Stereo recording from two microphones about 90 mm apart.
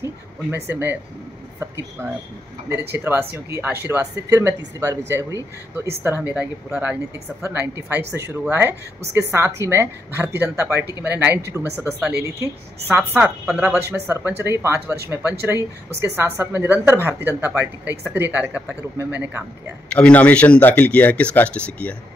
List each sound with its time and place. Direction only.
0.0 s speech: 25° right (ahead or behind)
2.9 s speech: 25° right (ahead or behind)
6.3 s speech: 15° right (ahead or behind)
7.4 s speech: 25° right (ahead or behind)
17.3 s speech: 15° right (ahead or behind)
19.9 s speech: 15° left (ahead or behind)